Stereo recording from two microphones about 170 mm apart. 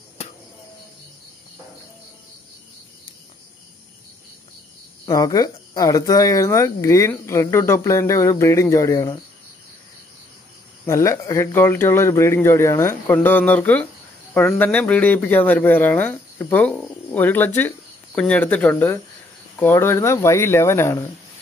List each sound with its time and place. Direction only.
5.0 s speech: 20° left (ahead or behind)
10.9 s speech: 15° left (ahead or behind)